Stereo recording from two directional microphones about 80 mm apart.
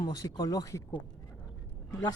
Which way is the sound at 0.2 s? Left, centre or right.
Left.